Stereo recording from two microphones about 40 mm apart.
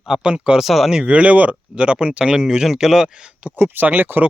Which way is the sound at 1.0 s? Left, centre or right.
Right.